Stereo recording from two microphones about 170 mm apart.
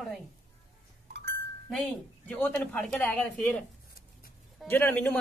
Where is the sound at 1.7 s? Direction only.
5° left (ahead or behind).